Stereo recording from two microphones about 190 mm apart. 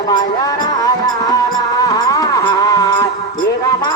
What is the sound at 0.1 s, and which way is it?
Music, 20° left (ahead or behind).